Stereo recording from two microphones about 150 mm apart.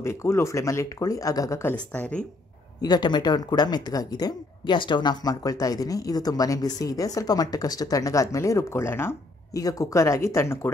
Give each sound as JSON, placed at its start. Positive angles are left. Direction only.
{"t": 0.0, "sound": "speech", "side_deg": 20}
{"t": 2.8, "sound": "speech", "side_deg": 30}